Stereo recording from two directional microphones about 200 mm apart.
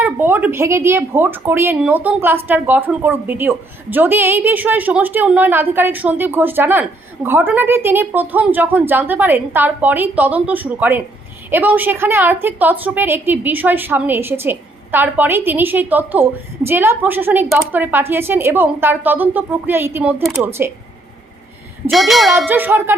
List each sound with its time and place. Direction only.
0.0 s a woman's voice: 10° right (ahead or behind)
21.8 s a woman's voice: centre (ahead or behind)